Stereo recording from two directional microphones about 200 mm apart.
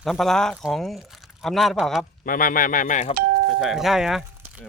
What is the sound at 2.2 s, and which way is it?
Speech, 45° left (ahead or behind).